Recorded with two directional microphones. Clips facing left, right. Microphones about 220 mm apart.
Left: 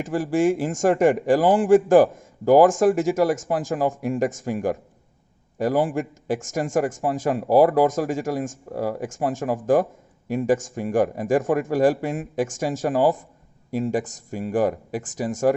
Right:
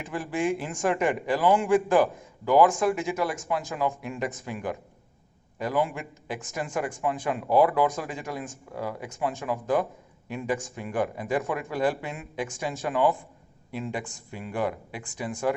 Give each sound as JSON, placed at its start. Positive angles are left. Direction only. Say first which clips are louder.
{"t": 0.0, "sound": "a man's voice", "louder": "left 8 dB", "side_deg": 45}